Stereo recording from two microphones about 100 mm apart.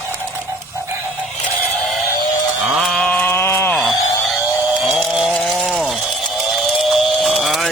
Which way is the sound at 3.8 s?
Centre (ahead or behind).